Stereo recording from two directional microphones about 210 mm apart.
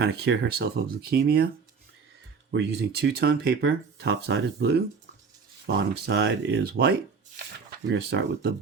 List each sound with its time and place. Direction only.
0.0 s speech: 50° right (ahead or behind)
2.5 s speech: 55° right (ahead or behind)